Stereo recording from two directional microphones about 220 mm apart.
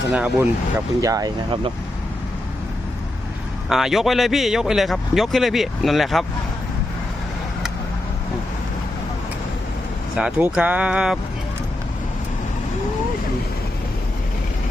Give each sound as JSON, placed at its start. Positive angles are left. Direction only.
{"t": 0.1, "sound": "a man's voice", "side_deg": -5}
{"t": 1.0, "sound": "speech", "side_deg": -15}
{"t": 3.7, "sound": "a man's voice", "side_deg": 0}
{"t": 10.2, "sound": "a man's voice", "side_deg": -5}